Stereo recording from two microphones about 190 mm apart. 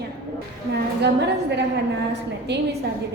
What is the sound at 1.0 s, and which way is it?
A woman's voice, 60° right (ahead or behind).